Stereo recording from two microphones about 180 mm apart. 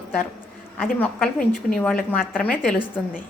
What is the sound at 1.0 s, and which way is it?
A woman's voice, 5° left (ahead or behind).